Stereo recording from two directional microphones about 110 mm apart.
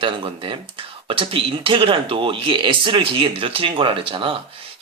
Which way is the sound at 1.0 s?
55° right (ahead or behind).